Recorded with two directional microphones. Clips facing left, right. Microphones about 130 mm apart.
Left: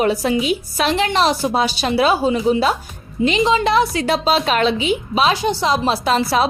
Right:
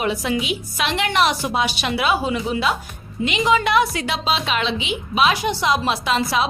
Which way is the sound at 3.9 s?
40° left (ahead or behind).